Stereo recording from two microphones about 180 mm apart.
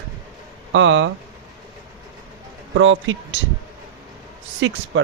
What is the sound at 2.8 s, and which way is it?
Speech, 90° right.